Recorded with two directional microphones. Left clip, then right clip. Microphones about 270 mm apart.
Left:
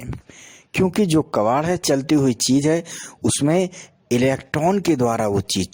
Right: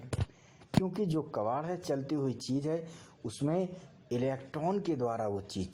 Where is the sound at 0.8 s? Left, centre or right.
Left.